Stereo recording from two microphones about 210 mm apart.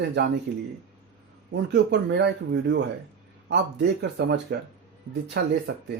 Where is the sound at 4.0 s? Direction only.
50° right (ahead or behind).